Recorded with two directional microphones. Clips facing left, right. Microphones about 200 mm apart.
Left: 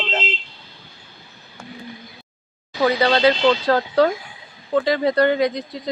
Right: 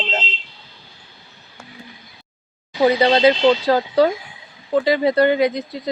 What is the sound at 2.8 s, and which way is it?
Speech, 20° right (ahead or behind).